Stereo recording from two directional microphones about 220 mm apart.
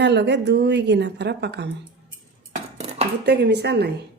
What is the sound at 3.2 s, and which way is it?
Speech, 50° right (ahead or behind).